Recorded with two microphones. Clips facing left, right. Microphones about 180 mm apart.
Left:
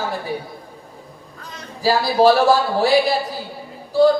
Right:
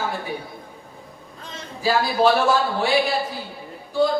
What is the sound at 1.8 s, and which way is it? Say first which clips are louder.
Speech: left 4 dB; 35° left (ahead or behind).